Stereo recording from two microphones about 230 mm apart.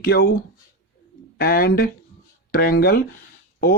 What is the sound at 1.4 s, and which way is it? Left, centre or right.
Speech, left.